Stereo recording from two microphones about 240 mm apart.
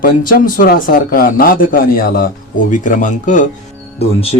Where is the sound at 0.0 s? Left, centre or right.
Left.